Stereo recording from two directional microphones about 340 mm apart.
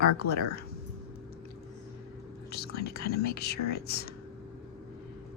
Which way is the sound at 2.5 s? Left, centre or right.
Left.